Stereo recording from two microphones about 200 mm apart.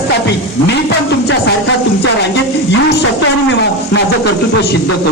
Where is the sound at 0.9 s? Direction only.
60° left (ahead or behind).